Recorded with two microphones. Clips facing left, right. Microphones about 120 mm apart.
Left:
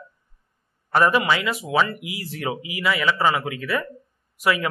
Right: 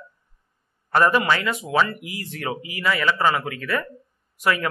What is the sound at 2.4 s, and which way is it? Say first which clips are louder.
A man's voice: even; 15° left (ahead or behind).